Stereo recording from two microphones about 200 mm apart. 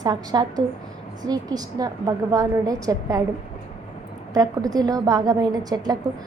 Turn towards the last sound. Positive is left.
turn(degrees=-20)  # may be behind; listen again after turning